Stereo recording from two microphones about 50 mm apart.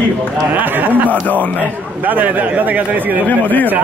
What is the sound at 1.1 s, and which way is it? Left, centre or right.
Speech, left.